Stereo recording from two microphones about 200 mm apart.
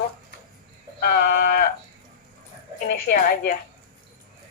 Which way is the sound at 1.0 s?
50° left (ahead or behind).